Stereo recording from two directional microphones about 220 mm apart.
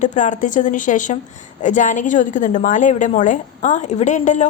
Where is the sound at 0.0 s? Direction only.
35° left (ahead or behind).